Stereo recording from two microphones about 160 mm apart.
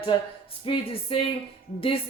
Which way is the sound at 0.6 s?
35° left (ahead or behind).